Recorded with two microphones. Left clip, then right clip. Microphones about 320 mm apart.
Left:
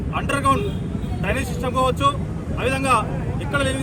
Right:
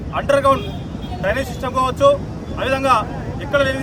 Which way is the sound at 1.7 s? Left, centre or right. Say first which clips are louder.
Right 5 dB; centre.